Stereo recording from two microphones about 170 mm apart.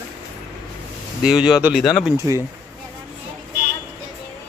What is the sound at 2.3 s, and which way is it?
Speech, 20° right (ahead or behind).